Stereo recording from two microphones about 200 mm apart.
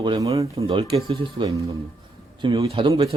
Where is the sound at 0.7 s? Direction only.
25° right (ahead or behind).